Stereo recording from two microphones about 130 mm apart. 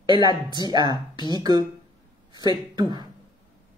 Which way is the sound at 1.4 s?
30° right (ahead or behind).